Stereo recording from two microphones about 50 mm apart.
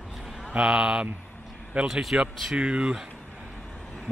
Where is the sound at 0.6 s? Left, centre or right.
Centre.